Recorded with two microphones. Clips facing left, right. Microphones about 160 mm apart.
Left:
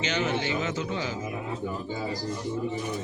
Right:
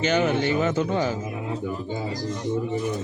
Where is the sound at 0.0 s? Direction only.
50° right (ahead or behind).